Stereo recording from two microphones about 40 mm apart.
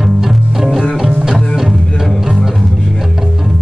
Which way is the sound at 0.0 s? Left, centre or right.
Centre.